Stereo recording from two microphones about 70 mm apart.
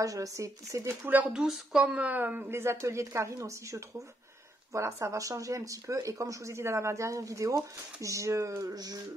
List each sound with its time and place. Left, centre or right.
0.0 s speech: right
1.0 s a woman's voice: right
1.3 s speech: centre
2.0 s a woman's voice: right
2.5 s speech: right
8.7 s music: right